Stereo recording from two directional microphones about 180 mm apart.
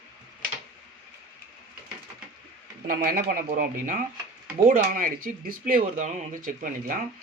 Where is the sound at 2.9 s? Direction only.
55° right (ahead or behind).